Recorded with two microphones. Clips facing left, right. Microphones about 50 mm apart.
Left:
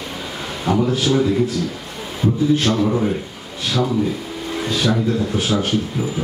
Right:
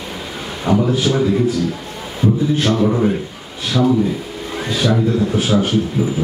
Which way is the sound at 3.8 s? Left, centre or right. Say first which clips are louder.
Right 5 dB; centre.